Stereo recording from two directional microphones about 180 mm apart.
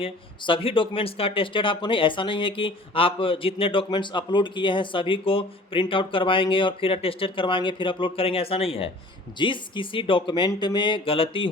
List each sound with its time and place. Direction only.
0.0 s speech: 30° left (ahead or behind)